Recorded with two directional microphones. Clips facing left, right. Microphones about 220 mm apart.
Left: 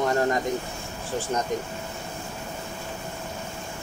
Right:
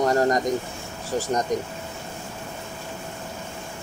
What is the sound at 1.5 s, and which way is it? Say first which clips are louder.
Speech: right 3 dB; 40° right (ahead or behind).